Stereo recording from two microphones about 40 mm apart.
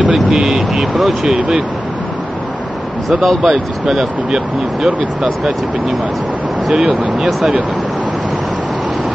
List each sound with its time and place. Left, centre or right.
0.1 s speech: centre
3.1 s speech: centre